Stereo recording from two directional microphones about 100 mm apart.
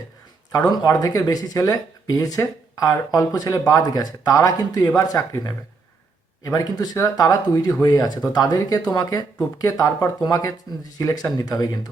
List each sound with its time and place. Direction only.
0.9 s speech: 35° left (ahead or behind)